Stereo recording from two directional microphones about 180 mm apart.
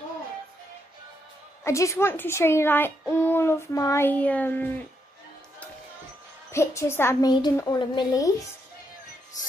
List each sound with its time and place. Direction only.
1.6 s a child's voice: 15° left (ahead or behind)
6.5 s a woman's voice: 15° left (ahead or behind)